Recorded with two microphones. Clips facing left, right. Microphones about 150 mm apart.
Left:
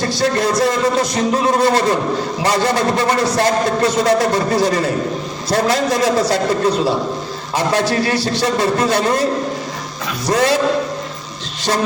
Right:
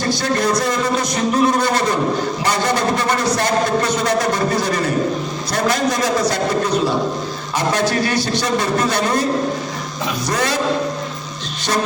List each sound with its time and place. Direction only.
0.1 s a man's voice: 30° left (ahead or behind)
7.7 s a man's voice: 30° left (ahead or behind)
10.2 s a man's voice: 30° left (ahead or behind)